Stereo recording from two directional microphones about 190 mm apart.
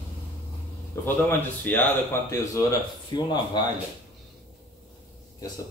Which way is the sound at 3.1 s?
25° left (ahead or behind).